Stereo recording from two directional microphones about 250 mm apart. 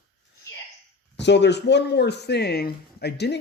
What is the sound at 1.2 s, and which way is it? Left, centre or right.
Speech, left.